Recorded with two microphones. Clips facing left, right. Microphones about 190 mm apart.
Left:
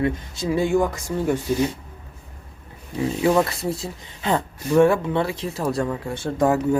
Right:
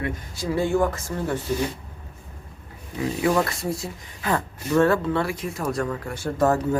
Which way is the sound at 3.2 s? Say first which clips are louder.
Left 3 dB; 25° left (ahead or behind).